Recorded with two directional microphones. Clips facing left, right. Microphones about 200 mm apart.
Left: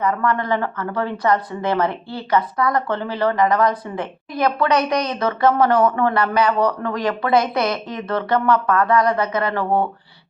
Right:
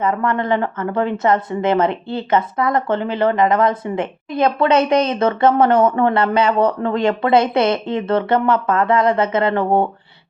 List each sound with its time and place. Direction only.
0.0 s a woman's voice: 25° right (ahead or behind)